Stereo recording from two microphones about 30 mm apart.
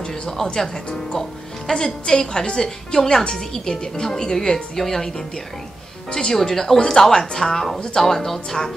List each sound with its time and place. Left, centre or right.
0.4 s speech: left
1.7 s a woman's voice: left
6.1 s speech: centre